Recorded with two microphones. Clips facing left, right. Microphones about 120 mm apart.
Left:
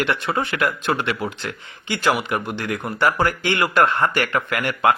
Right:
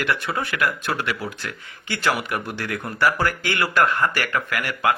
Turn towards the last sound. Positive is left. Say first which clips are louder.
# left 3 dB
turn(degrees=25)  # may be behind; listen again after turning